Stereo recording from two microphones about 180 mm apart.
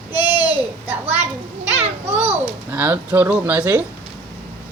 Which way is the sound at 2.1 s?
35° right (ahead or behind).